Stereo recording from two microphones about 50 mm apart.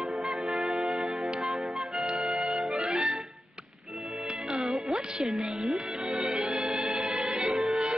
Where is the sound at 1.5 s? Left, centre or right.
Centre.